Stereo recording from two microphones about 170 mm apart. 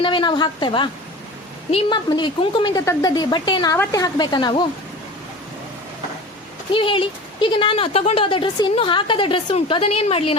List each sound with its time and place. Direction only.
0.0 s speech: 30° left (ahead or behind)
6.7 s speech: 30° left (ahead or behind)